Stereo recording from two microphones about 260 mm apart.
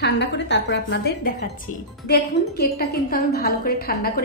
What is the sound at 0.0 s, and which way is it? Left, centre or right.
A woman's voice, left.